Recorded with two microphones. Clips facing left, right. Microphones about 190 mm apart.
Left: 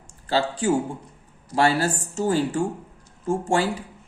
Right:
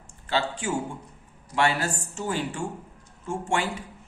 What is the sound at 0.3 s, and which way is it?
A man's voice, 35° left (ahead or behind).